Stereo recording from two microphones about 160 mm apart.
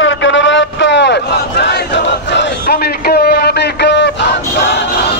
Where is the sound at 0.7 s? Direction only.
90° left.